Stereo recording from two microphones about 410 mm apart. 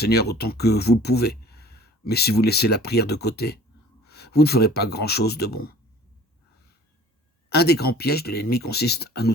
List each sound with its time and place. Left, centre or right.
0.0 s speech: left
7.5 s speech: left